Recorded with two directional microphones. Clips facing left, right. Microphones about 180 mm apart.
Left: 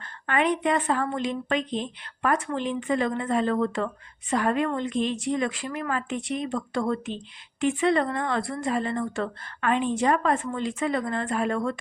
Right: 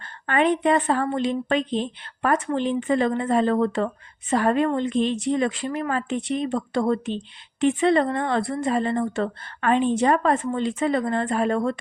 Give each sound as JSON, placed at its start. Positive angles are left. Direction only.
{"t": 0.0, "sound": "a woman's voice", "side_deg": -35}